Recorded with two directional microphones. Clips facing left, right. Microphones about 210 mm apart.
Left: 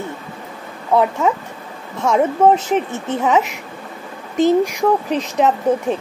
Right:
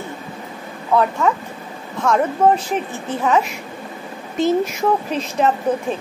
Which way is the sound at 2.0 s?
20° left (ahead or behind).